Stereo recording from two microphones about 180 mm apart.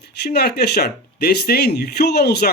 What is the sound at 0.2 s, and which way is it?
Speech, 65° left (ahead or behind).